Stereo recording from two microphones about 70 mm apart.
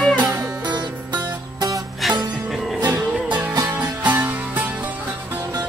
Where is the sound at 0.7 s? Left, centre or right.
Right.